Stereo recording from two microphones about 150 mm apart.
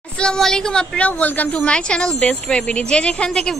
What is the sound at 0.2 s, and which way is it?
A woman's voice, 5° left (ahead or behind).